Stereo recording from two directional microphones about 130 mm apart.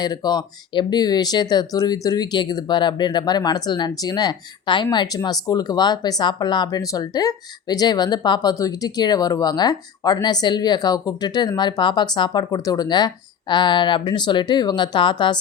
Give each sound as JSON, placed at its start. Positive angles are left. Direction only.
{"t": 0.0, "sound": "speech", "side_deg": 30}